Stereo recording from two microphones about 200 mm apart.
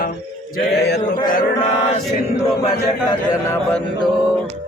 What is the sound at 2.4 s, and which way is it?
A man's voice, 25° left (ahead or behind).